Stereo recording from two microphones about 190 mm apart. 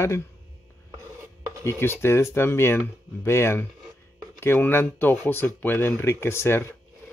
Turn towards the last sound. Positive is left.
turn(degrees=15)  # may be behind; listen again after turning